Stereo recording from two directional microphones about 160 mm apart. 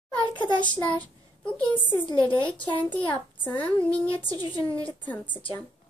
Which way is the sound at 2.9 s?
10° left (ahead or behind).